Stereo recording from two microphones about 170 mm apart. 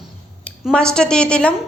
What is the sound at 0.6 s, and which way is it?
Speech, 5° left (ahead or behind).